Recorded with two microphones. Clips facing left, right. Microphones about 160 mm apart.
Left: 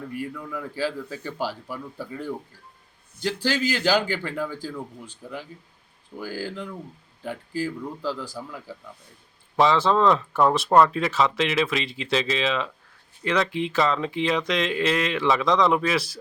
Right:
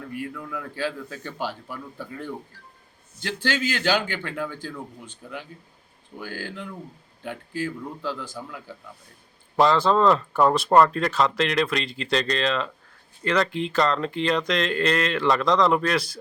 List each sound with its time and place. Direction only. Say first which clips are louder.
0.1 s speech: right 1 dB; centre (ahead or behind)
3.5 s speech: even; centre (ahead or behind)
3.9 s speech: left 3 dB; 35° left (ahead or behind)
4.2 s speech: left 2 dB; centre (ahead or behind)
6.1 s speech: left 3 dB; 5° left (ahead or behind)